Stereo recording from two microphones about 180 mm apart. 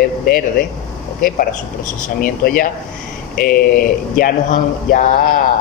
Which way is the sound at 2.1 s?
55° left (ahead or behind).